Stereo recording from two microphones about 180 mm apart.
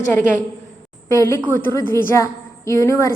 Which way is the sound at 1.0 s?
15° left (ahead or behind).